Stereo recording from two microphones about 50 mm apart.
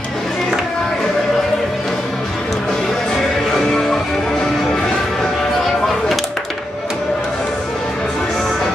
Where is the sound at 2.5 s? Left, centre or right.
Centre.